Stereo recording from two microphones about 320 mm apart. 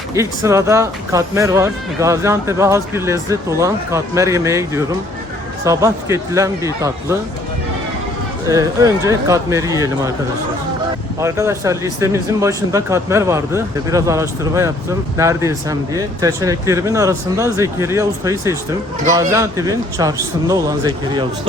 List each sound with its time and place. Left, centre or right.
0.1 s speech: centre
8.4 s speech: centre
11.2 s speech: centre